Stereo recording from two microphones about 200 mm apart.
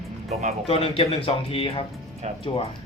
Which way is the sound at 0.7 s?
30° left (ahead or behind).